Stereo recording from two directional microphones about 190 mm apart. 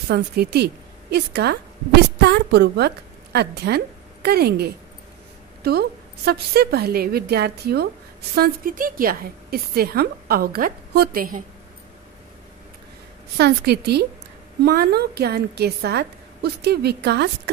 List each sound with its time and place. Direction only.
0.1 s a woman's voice: 60° right (ahead or behind)
13.4 s a woman's voice: 60° right (ahead or behind)